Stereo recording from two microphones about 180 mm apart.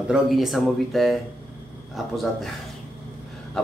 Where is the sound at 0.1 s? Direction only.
Centre (ahead or behind).